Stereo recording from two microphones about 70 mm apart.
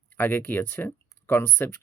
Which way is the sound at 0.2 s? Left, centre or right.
Left.